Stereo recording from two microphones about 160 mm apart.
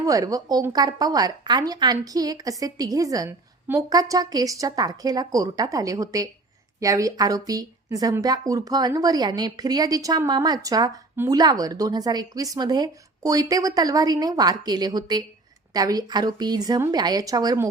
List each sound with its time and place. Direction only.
0.0 s a woman's voice: 20° right (ahead or behind)